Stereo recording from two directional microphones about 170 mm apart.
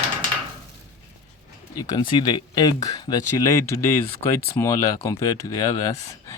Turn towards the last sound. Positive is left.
turn(degrees=20)  # may be behind; listen again after turning